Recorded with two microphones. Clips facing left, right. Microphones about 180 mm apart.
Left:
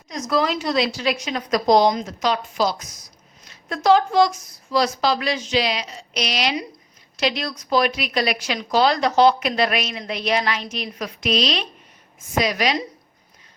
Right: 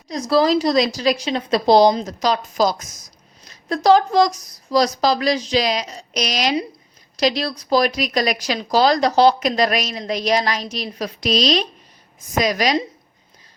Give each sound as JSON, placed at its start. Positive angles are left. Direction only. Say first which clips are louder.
{"t": 0.1, "sound": "a woman's voice", "louder": "right 5 dB", "side_deg": -35}